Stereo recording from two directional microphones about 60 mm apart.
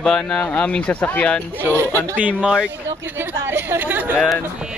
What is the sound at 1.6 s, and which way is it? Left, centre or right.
Speech, right.